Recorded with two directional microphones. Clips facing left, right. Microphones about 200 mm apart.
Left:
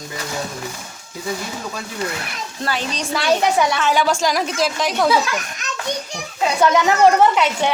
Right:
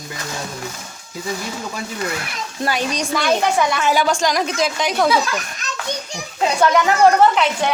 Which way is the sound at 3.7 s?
10° right (ahead or behind).